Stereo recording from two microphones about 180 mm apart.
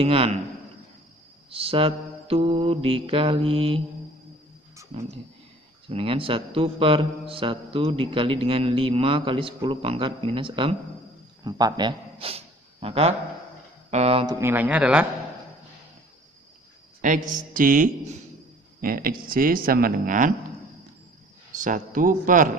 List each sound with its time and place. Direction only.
0.0 s speech: 30° right (ahead or behind)
1.5 s speech: 30° right (ahead or behind)
4.9 s a man's voice: 35° right (ahead or behind)
14.2 s speech: 10° right (ahead or behind)
17.0 s speech: 45° right (ahead or behind)
21.5 s speech: 45° right (ahead or behind)